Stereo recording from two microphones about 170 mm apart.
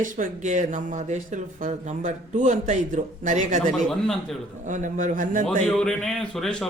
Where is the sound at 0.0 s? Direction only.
50° right (ahead or behind).